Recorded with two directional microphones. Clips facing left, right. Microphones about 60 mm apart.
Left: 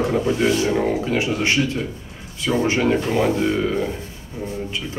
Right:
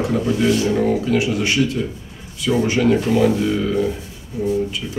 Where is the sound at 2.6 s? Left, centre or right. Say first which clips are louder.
Right 3 dB; left.